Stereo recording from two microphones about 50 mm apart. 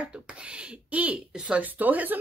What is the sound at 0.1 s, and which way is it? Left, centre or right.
Speech, right.